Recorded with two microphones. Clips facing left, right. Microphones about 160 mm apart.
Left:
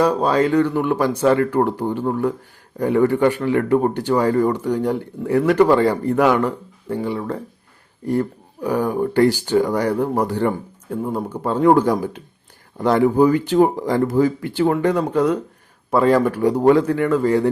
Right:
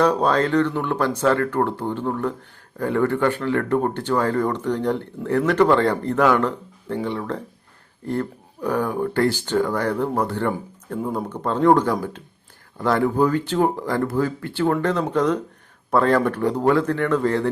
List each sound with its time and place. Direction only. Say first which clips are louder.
0.0 s speech: left 2 dB; 5° left (ahead or behind)